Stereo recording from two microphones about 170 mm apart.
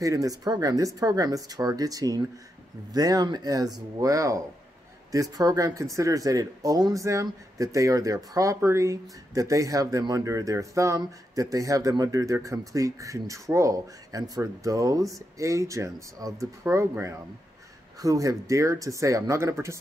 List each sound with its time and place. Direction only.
0.0 s speech: 20° right (ahead or behind)